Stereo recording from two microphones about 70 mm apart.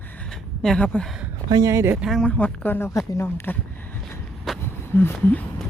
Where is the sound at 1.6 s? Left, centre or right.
Right.